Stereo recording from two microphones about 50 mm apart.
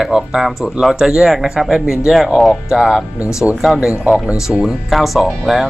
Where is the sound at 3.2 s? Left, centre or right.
Left.